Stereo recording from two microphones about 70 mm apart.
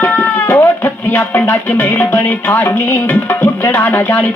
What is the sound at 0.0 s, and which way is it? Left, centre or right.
Cat, left.